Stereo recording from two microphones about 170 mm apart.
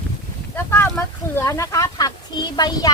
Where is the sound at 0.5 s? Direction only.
15° left (ahead or behind).